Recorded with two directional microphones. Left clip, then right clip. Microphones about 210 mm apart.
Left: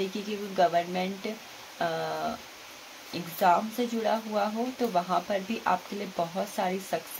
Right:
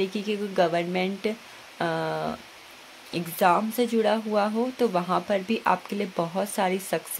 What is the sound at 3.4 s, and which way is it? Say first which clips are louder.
Speech: right 2 dB; 55° right (ahead or behind).